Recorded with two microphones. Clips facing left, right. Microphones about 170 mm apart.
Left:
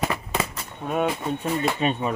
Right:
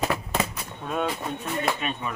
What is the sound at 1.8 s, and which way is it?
Speech, 30° left (ahead or behind).